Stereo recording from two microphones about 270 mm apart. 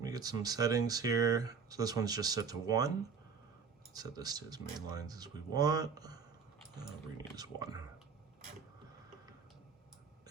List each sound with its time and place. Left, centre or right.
0.0 s speech: centre
3.9 s speech: centre